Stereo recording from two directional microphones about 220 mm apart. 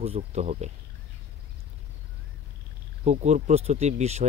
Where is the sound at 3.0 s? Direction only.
30° right (ahead or behind).